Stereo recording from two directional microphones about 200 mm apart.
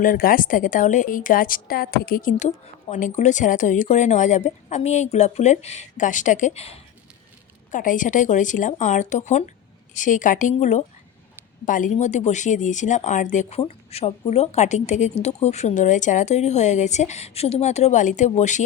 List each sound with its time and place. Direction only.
0.0 s a woman's voice: 45° left (ahead or behind)